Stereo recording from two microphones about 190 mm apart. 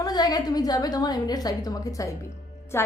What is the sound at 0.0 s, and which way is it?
A woman's voice, 20° left (ahead or behind).